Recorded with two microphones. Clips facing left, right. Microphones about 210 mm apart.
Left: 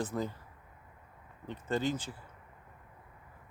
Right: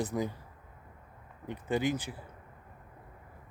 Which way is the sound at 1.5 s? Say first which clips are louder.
Right 2 dB; 15° right (ahead or behind).